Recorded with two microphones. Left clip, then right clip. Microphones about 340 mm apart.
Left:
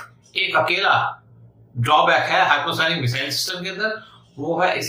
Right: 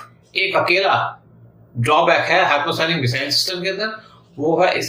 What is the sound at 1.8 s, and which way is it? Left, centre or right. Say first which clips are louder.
A man's voice: right 1 dB; centre.